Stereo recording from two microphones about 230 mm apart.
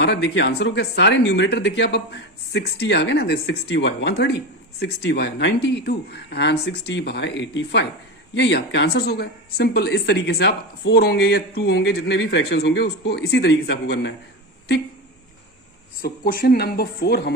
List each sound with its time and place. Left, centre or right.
0.0 s speech: left
16.0 s speech: left